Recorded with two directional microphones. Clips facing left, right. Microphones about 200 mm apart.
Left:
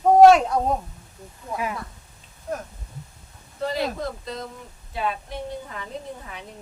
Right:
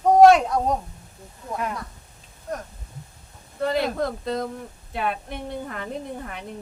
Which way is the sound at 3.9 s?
55° right (ahead or behind).